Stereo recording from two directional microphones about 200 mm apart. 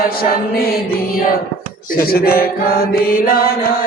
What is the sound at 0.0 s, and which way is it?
Chant, 50° left (ahead or behind).